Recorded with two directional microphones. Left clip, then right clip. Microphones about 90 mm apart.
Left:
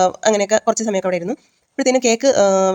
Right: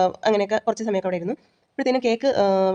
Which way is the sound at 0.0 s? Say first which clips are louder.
Left 4 dB; 35° left (ahead or behind).